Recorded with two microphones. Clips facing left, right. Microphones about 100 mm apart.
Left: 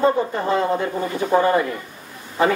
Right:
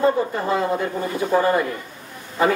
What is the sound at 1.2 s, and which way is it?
Speech, 20° left (ahead or behind).